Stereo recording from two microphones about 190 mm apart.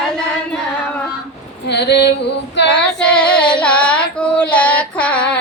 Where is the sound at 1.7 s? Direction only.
60° left (ahead or behind).